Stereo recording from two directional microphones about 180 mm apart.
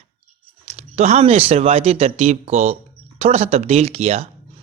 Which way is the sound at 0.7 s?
40° right (ahead or behind).